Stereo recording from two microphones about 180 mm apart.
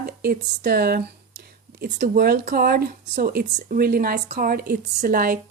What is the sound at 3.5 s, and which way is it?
Speech, 45° right (ahead or behind).